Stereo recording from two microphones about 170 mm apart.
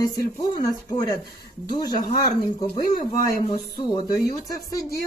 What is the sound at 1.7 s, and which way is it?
Speech, 25° left (ahead or behind).